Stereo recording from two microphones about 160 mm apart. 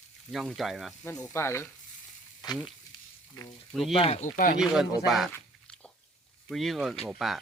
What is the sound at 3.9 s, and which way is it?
Speech, 35° left (ahead or behind).